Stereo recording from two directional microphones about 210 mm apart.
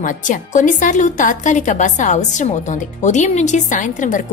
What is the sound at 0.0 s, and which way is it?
A woman's voice, 35° left (ahead or behind).